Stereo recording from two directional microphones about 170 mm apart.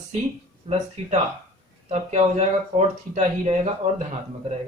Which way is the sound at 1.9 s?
40° right (ahead or behind).